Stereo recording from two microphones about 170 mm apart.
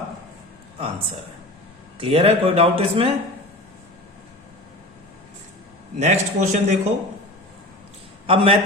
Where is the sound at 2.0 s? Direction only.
35° right (ahead or behind).